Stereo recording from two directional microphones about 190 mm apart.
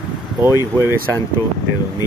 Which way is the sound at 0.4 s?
15° right (ahead or behind).